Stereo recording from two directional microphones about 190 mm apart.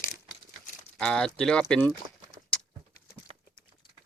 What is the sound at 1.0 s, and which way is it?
Speech, 5° left (ahead or behind).